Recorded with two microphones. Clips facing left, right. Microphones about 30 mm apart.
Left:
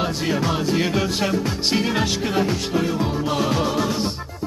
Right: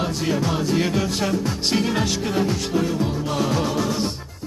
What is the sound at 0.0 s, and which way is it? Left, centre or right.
Music, centre.